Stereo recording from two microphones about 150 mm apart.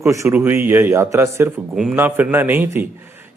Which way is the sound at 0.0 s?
20° right (ahead or behind).